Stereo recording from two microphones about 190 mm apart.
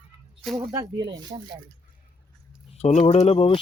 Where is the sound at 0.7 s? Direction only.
20° right (ahead or behind).